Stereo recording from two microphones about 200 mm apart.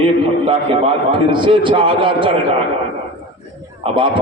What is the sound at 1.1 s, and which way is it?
A man's voice, 25° right (ahead or behind).